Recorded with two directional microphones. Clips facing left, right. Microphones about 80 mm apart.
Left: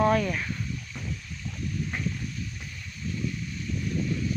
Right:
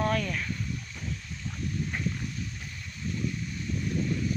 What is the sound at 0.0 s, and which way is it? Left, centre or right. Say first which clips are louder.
Speech: left 5 dB; left.